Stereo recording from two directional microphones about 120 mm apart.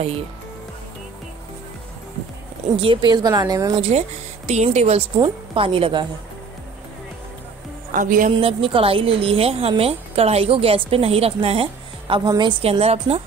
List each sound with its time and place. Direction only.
2.7 s a woman's voice: 45° right (ahead or behind); by 3.7 s 30° right (ahead or behind)
4.5 s a woman's voice: 65° right (ahead or behind)
5.2 s a woman's voice: 45° right (ahead or behind)
7.9 s speech: 90° right
8.3 s a woman's voice: 50° right (ahead or behind)
12.3 s a woman's voice: 40° right (ahead or behind)
12.6 s a woman's voice: 55° right (ahead or behind)